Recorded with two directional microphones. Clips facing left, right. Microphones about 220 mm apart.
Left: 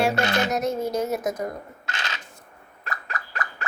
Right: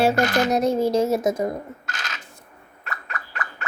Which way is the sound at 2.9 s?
35° left (ahead or behind).